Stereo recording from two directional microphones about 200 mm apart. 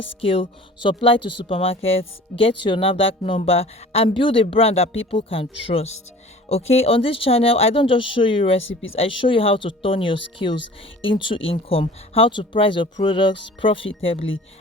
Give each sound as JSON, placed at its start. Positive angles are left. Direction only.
{"t": 0.2, "sound": "speech", "side_deg": 30}